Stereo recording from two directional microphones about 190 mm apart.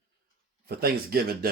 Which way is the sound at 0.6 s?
55° right (ahead or behind).